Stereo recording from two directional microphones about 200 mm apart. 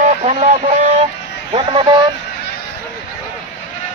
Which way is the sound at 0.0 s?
35° right (ahead or behind).